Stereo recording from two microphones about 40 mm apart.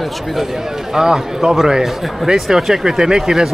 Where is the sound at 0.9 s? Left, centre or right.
Centre.